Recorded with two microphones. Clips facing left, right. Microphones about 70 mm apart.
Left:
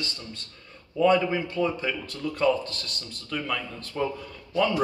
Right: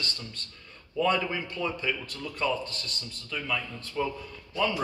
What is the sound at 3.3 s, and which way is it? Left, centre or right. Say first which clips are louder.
Speech: left 2 dB; left.